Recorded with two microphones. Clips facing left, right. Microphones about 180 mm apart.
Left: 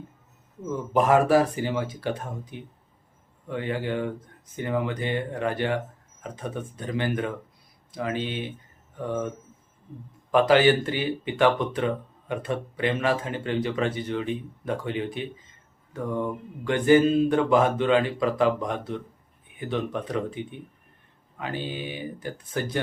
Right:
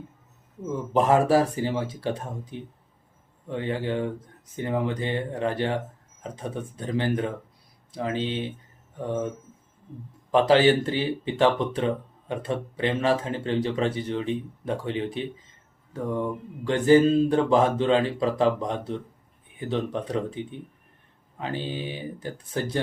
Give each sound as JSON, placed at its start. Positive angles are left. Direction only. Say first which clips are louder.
{"t": 0.9, "sound": "speech", "louder": "even", "side_deg": -30}
{"t": 10.3, "sound": "speech", "louder": "even", "side_deg": -30}
{"t": 16.6, "sound": "speech", "louder": "right 1 dB", "side_deg": -30}